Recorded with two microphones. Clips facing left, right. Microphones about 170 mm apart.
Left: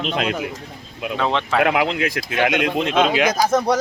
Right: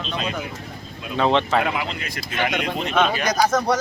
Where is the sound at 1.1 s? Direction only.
Centre (ahead or behind).